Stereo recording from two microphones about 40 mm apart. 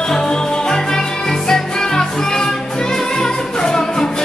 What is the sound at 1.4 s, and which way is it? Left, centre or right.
Music, centre.